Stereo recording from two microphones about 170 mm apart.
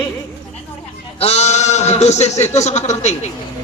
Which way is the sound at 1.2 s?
40° left (ahead or behind).